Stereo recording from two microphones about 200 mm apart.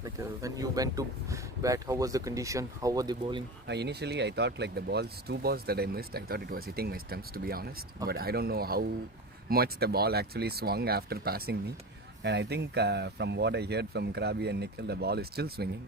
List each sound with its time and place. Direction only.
0.0 s speech: 15° right (ahead or behind)
3.7 s speech: 55° right (ahead or behind)